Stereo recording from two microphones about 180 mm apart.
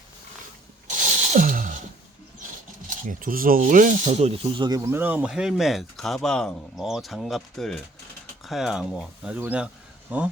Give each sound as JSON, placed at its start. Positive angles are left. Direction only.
{"t": 0.9, "sound": "a sound", "side_deg": -45}
{"t": 2.8, "sound": "rub", "side_deg": -50}
{"t": 4.9, "sound": "speech", "side_deg": -10}